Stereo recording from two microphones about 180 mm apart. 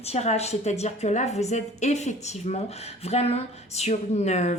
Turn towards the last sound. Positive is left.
turn(degrees=40)  # may be behind; listen again after turning